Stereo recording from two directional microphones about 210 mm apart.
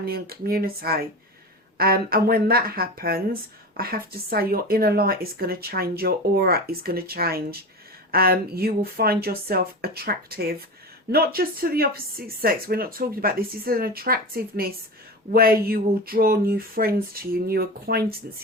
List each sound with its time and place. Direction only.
0.0 s a woman's voice: 45° right (ahead or behind)